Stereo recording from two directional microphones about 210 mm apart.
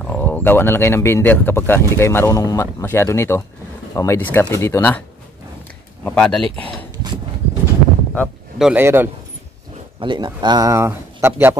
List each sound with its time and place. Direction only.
0.0 s speech: 10° left (ahead or behind)
6.0 s speech: 5° left (ahead or behind)
6.6 s a sound: 20° right (ahead or behind)
8.1 s a man's voice: centre (ahead or behind)
9.9 s speech: 20° right (ahead or behind)